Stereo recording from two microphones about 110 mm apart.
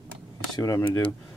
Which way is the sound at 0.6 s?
30° left (ahead or behind).